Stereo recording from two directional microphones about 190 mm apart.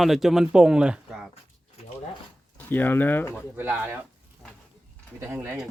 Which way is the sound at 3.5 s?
10° right (ahead or behind).